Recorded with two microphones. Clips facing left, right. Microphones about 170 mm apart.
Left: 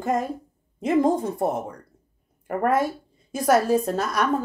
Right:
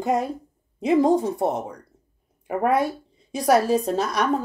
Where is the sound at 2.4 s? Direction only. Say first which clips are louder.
Right 1 dB; 5° right (ahead or behind).